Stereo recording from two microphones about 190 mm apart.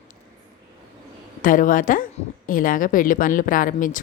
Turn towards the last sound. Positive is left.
turn(degrees=45)  # may be behind; listen again after turning